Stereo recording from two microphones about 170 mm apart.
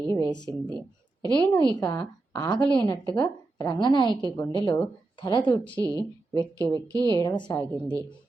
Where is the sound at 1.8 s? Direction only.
20° left (ahead or behind).